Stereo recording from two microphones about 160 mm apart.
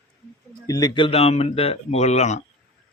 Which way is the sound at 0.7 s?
25° left (ahead or behind).